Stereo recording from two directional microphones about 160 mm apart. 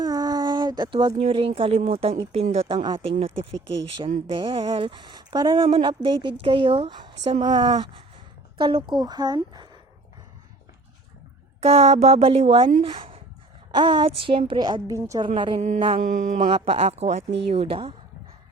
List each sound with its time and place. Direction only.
0.0 s speech: 25° right (ahead or behind); by 2.7 s 40° right (ahead or behind)
2.7 s speech: 30° right (ahead or behind)
4.3 s a woman's voice: 35° right (ahead or behind)
11.6 s a woman's voice: 40° right (ahead or behind); by 15.2 s 20° right (ahead or behind)
15.4 s speech: 30° right (ahead or behind)
16.0 s a sound: 55° right (ahead or behind)
16.6 s speech: 40° right (ahead or behind)